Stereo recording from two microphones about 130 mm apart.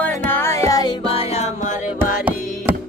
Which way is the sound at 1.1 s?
50° left (ahead or behind).